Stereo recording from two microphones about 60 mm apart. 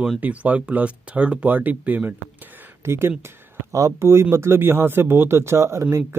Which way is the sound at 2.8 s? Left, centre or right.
Right.